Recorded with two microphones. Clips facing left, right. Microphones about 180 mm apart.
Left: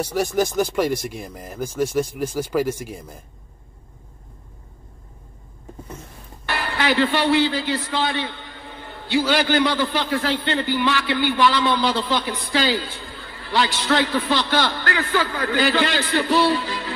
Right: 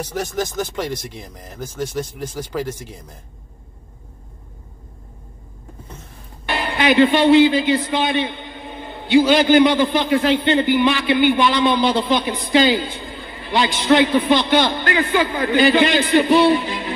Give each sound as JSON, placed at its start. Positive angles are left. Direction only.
{"t": 0.0, "sound": "speech", "side_deg": 10}
{"t": 6.4, "sound": "a man's voice", "side_deg": -20}